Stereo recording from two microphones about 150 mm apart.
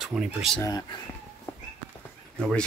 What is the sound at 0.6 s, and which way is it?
Speech, 25° left (ahead or behind).